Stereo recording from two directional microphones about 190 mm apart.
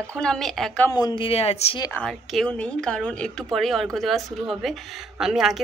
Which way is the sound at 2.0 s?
5° left (ahead or behind).